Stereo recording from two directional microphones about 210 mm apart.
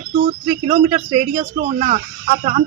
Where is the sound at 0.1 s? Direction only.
35° right (ahead or behind).